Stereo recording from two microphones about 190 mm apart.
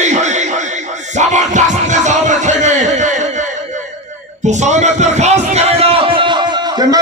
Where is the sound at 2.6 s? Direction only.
40° right (ahead or behind).